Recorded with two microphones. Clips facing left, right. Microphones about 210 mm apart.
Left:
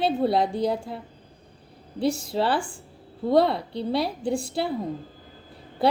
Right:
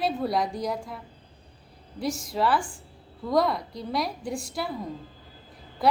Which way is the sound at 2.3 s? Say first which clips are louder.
Left 1 dB; 30° left (ahead or behind).